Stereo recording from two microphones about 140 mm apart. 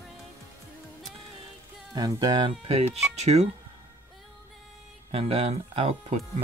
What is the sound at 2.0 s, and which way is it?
Speech, 30° right (ahead or behind).